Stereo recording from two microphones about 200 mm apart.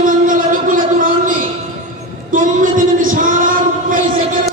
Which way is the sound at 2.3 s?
40° right (ahead or behind).